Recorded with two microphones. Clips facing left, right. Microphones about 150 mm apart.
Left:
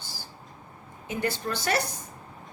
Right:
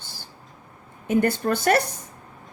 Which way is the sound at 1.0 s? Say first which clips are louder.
Right 9 dB; 55° right (ahead or behind).